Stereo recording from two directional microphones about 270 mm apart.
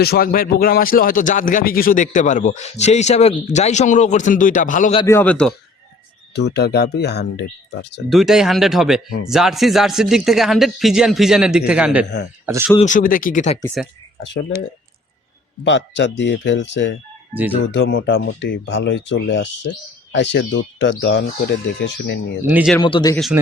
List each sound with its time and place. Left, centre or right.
0.0 s speech: left
5.0 s speech: centre
6.3 s speech: left
8.1 s speech: centre
12.8 s speech: left
15.6 s speech: left
22.4 s speech: centre
22.8 s speech: centre
23.1 s speech: centre